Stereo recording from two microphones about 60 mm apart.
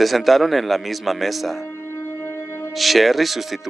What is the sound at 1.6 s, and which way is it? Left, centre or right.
Music, left.